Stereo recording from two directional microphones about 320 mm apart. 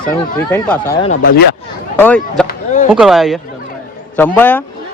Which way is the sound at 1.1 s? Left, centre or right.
Left.